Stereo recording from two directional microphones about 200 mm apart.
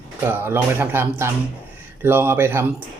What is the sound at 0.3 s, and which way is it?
Speech, 10° right (ahead or behind).